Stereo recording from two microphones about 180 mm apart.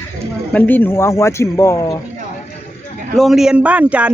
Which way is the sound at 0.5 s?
10° left (ahead or behind).